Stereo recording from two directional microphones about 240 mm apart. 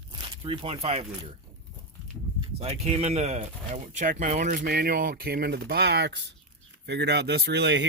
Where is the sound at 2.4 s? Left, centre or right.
Right.